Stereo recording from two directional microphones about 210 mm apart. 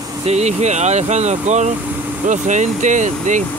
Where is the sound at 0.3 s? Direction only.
30° right (ahead or behind).